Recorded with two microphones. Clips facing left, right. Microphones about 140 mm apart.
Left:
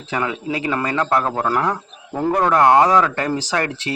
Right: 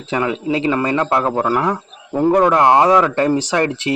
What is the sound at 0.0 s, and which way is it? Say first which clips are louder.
A man's voice: right 4 dB; 20° right (ahead or behind).